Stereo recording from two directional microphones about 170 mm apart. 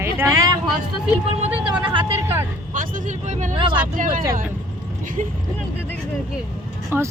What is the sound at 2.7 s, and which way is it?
Speech, 45° right (ahead or behind).